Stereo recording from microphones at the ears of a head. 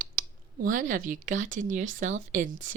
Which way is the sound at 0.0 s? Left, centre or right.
Right.